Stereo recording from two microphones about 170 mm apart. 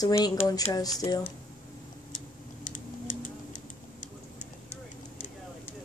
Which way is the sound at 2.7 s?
50° left (ahead or behind).